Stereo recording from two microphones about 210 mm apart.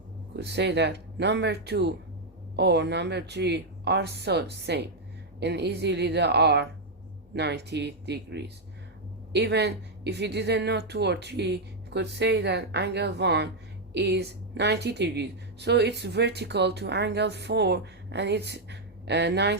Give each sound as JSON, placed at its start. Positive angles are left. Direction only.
{"t": 0.3, "sound": "a woman's voice", "side_deg": -55}